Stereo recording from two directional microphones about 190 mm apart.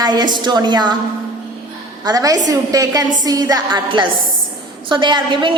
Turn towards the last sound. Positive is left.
turn(degrees=-25)  # may be behind; listen again after turning